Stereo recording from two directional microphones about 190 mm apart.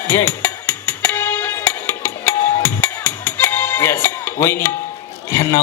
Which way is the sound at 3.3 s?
10° left (ahead or behind).